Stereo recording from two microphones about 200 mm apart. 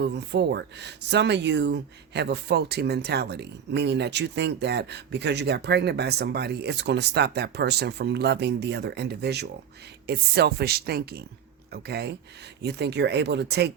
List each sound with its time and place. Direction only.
0.0 s speech: 60° right (ahead or behind)